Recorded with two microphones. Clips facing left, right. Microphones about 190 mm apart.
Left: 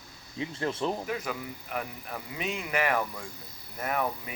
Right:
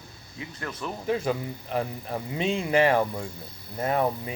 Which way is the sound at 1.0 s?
30° right (ahead or behind).